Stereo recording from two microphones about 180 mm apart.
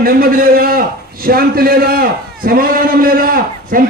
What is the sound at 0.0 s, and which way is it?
A man's voice, 55° right (ahead or behind).